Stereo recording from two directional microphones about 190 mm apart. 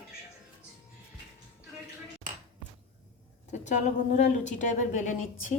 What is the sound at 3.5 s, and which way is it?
A woman's voice, 40° left (ahead or behind).